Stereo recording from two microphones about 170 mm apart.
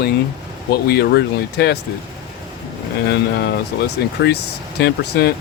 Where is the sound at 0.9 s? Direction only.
80° left.